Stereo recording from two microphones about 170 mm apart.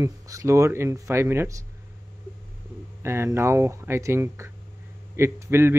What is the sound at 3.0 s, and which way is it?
Speech, 15° right (ahead or behind).